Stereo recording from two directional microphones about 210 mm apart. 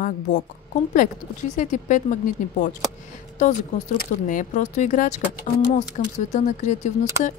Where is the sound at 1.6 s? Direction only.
35° left (ahead or behind).